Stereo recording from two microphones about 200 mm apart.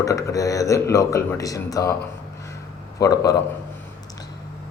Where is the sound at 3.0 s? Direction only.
15° left (ahead or behind).